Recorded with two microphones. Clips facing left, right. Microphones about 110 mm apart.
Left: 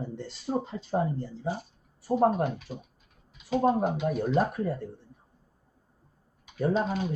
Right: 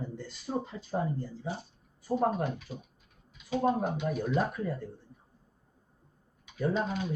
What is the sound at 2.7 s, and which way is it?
Speech, 15° left (ahead or behind).